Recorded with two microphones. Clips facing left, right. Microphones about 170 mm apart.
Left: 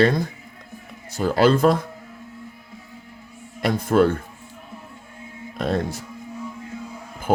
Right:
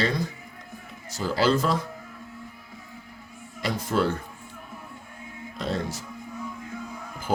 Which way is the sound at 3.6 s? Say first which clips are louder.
Left 7 dB; 55° left (ahead or behind).